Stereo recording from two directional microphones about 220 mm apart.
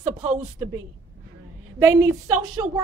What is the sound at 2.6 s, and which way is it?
Speech, 15° right (ahead or behind).